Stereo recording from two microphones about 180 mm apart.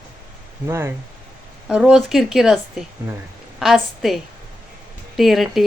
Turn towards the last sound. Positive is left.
turn(degrees=0)  # may be behind; listen again after turning